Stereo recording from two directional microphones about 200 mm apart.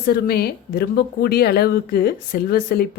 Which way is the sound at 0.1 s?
50° left (ahead or behind).